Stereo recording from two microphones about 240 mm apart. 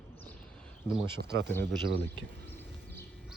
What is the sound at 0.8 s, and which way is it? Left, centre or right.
Speech, centre.